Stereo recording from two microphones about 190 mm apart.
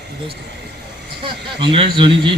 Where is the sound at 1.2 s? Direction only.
25° right (ahead or behind).